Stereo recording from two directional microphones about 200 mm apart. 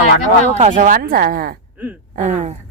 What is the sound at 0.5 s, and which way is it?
Speech, 35° right (ahead or behind).